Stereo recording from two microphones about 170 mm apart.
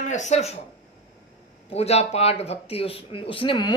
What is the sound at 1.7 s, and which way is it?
A man's voice, 35° left (ahead or behind).